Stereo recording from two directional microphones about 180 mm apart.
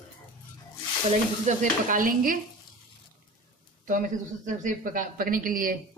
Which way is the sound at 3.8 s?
45° right (ahead or behind).